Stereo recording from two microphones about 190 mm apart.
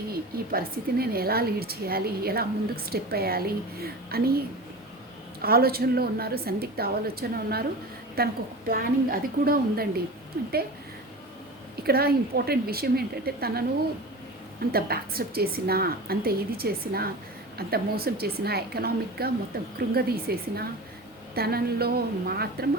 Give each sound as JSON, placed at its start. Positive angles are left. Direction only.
{"t": 0.1, "sound": "a woman's voice", "side_deg": -55}
{"t": 11.8, "sound": "a woman's voice", "side_deg": -55}
{"t": 14.7, "sound": "a woman's voice", "side_deg": -55}